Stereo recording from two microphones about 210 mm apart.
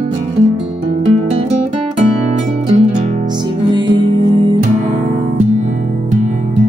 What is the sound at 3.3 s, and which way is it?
Music, 20° right (ahead or behind).